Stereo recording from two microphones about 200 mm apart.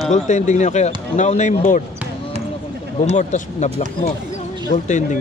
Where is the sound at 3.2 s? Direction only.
35° left (ahead or behind).